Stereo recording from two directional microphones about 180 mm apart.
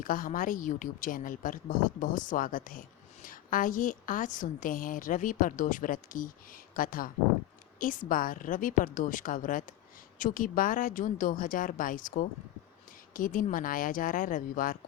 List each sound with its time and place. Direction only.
0.0 s a woman's voice: 50° left (ahead or behind)